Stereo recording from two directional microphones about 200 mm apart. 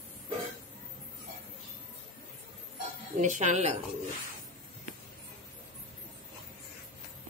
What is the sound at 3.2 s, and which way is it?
Speech, 35° right (ahead or behind).